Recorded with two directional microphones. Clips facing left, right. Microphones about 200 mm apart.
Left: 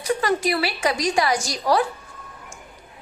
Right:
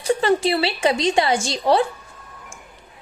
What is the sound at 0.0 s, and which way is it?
A woman's voice, 30° right (ahead or behind).